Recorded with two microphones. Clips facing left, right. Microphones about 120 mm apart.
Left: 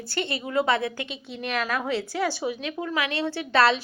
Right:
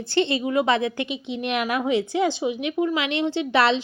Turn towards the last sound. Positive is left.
turn(degrees=-20)  # may be behind; listen again after turning